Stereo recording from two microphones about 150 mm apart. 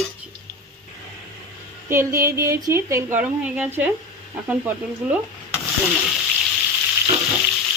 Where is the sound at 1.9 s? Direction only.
20° right (ahead or behind).